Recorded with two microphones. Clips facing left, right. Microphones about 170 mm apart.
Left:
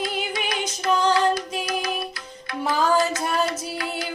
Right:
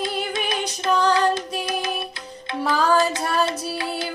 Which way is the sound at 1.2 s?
25° right (ahead or behind).